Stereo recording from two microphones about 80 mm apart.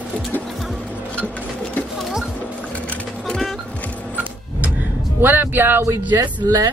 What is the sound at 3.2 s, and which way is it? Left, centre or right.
Music, centre.